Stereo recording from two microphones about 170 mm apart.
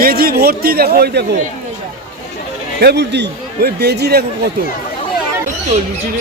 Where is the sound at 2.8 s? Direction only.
75° right (ahead or behind).